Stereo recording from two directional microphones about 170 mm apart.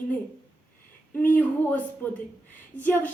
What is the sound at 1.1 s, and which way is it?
Speech, 10° left (ahead or behind).